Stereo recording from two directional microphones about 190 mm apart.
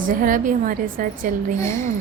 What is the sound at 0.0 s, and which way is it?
Speech, 45° right (ahead or behind).